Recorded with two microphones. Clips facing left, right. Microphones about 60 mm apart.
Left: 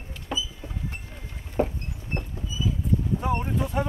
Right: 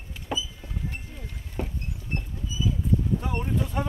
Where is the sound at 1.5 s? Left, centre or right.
Left.